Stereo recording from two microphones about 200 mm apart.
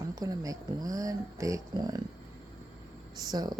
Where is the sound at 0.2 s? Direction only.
20° right (ahead or behind).